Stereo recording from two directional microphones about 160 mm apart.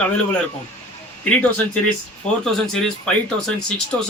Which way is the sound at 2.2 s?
45° left (ahead or behind).